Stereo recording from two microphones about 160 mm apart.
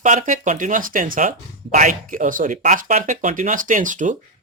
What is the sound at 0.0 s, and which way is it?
Speech, 50° right (ahead or behind).